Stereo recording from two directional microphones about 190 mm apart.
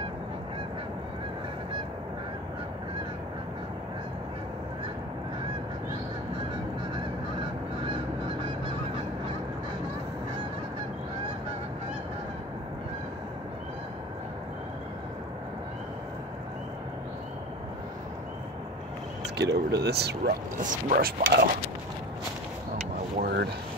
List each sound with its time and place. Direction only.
19.3 s speech: 60° right (ahead or behind)
23.1 s vehicle: 55° right (ahead or behind)